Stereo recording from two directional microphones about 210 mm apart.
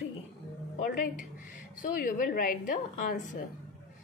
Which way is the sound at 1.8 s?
40° left (ahead or behind).